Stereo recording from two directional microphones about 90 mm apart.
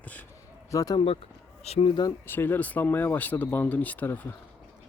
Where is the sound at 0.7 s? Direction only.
40° left (ahead or behind).